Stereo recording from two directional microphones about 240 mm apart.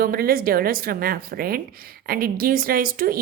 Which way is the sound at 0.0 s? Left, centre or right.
Right.